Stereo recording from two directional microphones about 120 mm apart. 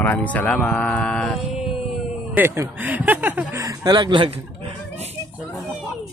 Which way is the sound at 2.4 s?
15° right (ahead or behind).